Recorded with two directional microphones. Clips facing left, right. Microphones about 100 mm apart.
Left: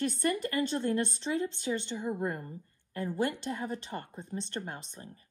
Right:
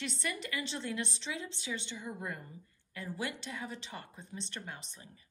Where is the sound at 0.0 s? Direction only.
50° left (ahead or behind).